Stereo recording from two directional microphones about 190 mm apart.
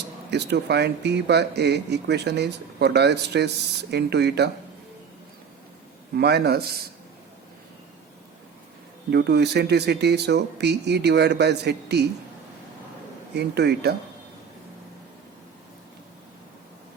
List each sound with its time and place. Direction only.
0.3 s speech: 60° right (ahead or behind)
6.1 s speech: 60° right (ahead or behind)
9.0 s speech: 60° right (ahead or behind)
13.3 s speech: 60° right (ahead or behind)